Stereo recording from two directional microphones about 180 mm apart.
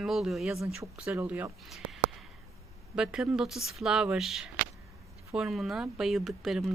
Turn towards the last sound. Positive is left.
turn(degrees=0)  # may be behind; listen again after turning